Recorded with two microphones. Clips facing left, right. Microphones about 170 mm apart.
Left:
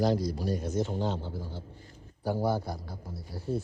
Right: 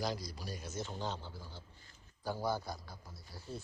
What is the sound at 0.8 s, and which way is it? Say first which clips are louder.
Speech: left 9 dB; 35° left (ahead or behind).